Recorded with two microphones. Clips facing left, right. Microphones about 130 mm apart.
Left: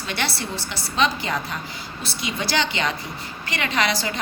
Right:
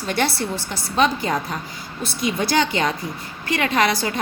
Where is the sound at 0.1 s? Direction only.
45° right (ahead or behind).